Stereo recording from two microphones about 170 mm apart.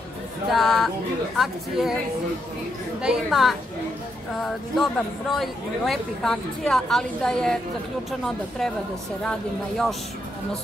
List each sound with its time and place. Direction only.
0.5 s speech: centre (ahead or behind)
3.0 s speech: 5° right (ahead or behind)